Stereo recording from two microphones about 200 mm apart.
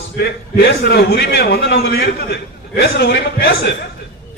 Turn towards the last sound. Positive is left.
turn(degrees=55)  # may be behind; listen again after turning